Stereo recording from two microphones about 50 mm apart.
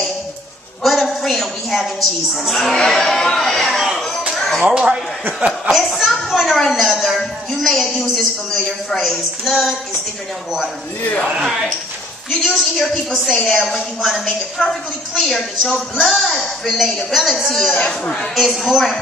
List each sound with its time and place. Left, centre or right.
0.8 s a sound: centre
2.9 s chatter: centre
3.7 s a sound: centre
4.6 s speech: centre
5.5 s a woman's voice: centre
11.3 s speech: centre
12.3 s a woman's voice: centre
17.8 s speech: centre
18.3 s a woman's voice: centre